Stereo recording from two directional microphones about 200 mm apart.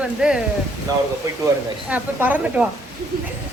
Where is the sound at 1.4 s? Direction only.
10° right (ahead or behind).